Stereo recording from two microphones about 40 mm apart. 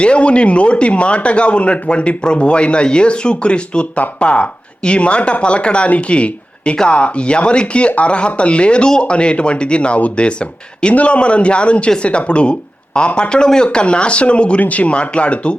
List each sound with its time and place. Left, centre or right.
0.0 s speech: left